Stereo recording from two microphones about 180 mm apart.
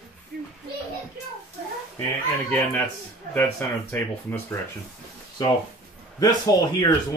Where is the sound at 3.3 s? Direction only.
10° left (ahead or behind).